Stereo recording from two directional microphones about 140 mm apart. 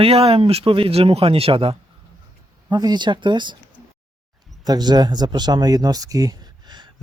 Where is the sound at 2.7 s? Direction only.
30° right (ahead or behind).